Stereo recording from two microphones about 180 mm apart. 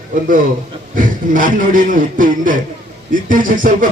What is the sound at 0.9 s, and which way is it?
Speech, 50° right (ahead or behind).